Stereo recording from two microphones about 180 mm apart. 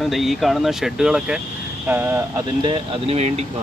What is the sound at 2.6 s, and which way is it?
Speech, 30° right (ahead or behind).